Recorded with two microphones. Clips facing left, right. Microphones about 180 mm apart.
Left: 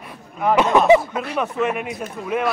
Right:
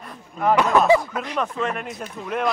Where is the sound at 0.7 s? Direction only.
20° left (ahead or behind).